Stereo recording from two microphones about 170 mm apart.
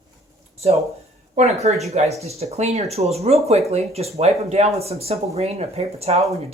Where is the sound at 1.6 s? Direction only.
40° right (ahead or behind).